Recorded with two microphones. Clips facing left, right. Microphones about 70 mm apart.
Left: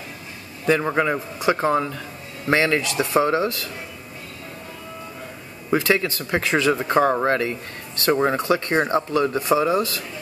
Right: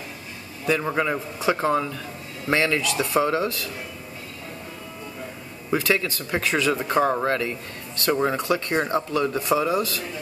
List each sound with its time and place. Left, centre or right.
0.8 s speech: centre
2.5 s speech: left
5.7 s speech: left
6.9 s speech: left